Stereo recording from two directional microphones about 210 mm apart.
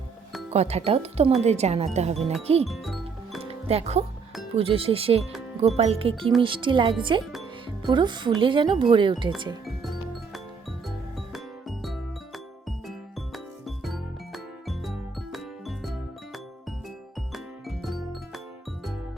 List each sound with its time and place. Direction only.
0.5 s speech: 30° right (ahead or behind)
2.6 s music: centre (ahead or behind)
3.7 s speech: 30° right (ahead or behind)
9.6 s music: centre (ahead or behind)
13.3 s music: centre (ahead or behind)
17.3 s music: centre (ahead or behind)